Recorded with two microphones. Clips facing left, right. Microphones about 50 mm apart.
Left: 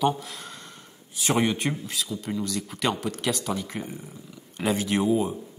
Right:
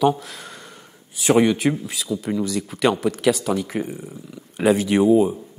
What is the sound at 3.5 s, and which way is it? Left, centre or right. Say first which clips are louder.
Speech: right 8 dB; right.